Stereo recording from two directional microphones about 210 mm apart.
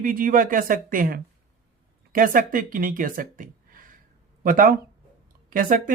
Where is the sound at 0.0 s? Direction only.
40° right (ahead or behind).